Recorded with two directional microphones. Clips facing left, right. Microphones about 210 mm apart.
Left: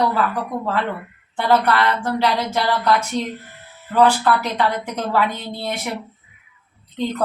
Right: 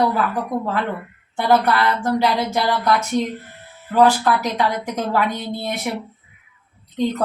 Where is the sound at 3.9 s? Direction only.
10° right (ahead or behind).